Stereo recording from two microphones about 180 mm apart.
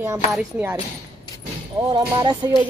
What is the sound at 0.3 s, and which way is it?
Speech, 5° right (ahead or behind).